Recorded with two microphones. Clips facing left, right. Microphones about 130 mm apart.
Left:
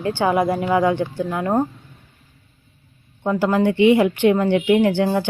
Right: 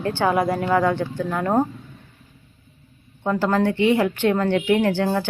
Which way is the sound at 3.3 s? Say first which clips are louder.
Left 2 dB; 10° left (ahead or behind).